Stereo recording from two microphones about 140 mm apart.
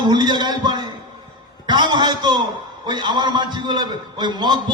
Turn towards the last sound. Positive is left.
turn(degrees=-30)  # may be behind; listen again after turning